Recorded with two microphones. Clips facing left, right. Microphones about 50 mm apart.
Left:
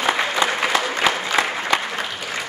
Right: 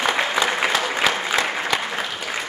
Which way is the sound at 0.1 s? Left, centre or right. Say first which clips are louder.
Even; centre.